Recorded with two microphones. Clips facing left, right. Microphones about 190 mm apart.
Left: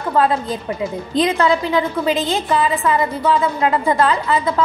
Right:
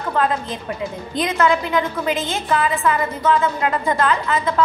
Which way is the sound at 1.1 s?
35° left (ahead or behind).